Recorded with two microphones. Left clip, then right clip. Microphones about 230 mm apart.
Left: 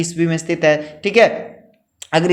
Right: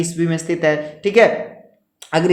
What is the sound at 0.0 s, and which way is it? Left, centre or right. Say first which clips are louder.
Speech: left 1 dB; left.